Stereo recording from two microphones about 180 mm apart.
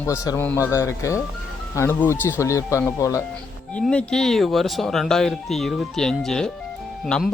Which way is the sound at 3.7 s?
5° left (ahead or behind).